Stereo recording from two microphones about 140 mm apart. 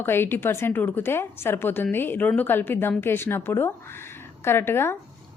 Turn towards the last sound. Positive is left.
turn(degrees=15)  # may be behind; listen again after turning